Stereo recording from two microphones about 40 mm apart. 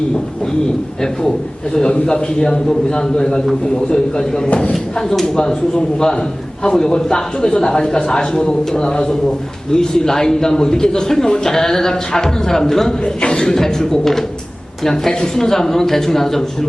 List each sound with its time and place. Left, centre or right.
1.7 s a man's voice: centre
4.4 s speech: left
4.7 s a man's voice: centre